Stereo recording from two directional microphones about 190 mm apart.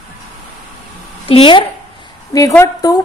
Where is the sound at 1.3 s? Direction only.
25° left (ahead or behind).